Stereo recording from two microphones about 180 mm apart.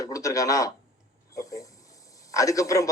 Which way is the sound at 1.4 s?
20° left (ahead or behind).